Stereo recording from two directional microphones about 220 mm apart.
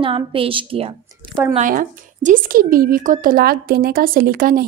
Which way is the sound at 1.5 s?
35° right (ahead or behind).